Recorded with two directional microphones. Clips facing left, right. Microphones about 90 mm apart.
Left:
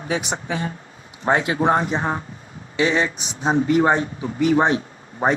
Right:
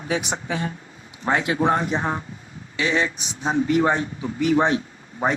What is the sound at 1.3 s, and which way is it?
Speech, 30° left (ahead or behind).